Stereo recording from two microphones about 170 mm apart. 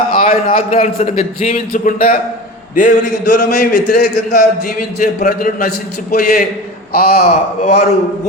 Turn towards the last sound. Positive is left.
turn(degrees=40)  # may be behind; listen again after turning